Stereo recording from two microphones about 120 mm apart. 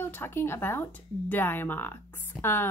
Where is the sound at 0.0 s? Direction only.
20° left (ahead or behind).